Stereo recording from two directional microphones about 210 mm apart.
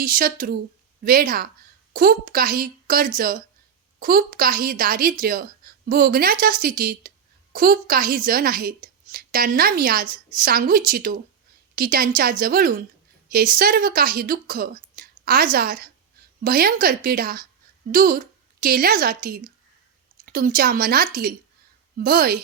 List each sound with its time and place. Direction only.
0.0 s a woman's voice: 40° right (ahead or behind)